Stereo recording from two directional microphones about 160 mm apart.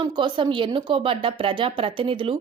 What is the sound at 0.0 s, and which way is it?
A woman's voice, 30° right (ahead or behind).